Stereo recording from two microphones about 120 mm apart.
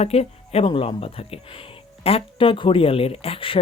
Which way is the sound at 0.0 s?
60° left (ahead or behind).